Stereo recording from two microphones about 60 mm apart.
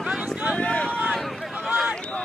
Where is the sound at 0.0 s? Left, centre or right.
Centre.